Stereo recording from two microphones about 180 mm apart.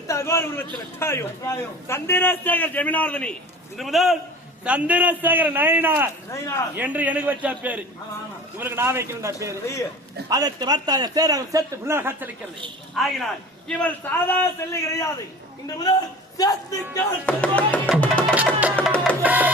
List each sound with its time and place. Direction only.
0.1 s a man's voice: 15° left (ahead or behind); by 6.1 s 10° right (ahead or behind)
6.3 s a man's voice: 15° left (ahead or behind)
6.7 s a man's voice: 10° right (ahead or behind)
12.9 s a man's voice: centre (ahead or behind); by 16.5 s 20° left (ahead or behind)
16.9 s a man's voice: 10° left (ahead or behind)
18.0 s music: 10° left (ahead or behind)
19.2 s music: 10° right (ahead or behind)